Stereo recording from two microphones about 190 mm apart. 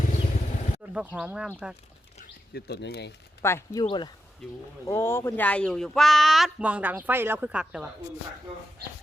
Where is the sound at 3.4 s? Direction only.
15° left (ahead or behind).